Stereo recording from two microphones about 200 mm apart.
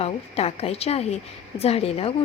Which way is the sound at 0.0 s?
30° left (ahead or behind).